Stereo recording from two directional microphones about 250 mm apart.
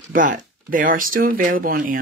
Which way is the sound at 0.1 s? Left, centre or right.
Right.